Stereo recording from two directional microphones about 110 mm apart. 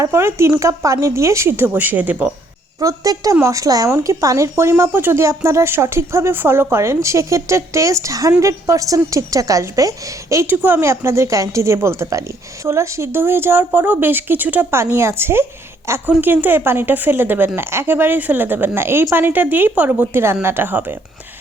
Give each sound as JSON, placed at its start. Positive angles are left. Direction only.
{"t": 0.0, "sound": "speech", "side_deg": -25}
{"t": 2.8, "sound": "a woman's voice", "side_deg": -30}
{"t": 10.5, "sound": "a woman's voice", "side_deg": -20}